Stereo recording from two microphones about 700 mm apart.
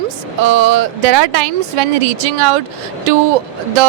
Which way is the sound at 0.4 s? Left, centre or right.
Right.